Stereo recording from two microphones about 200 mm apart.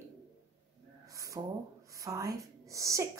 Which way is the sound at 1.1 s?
15° right (ahead or behind).